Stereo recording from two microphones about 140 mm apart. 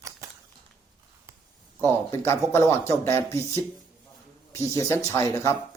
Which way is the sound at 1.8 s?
20° left (ahead or behind).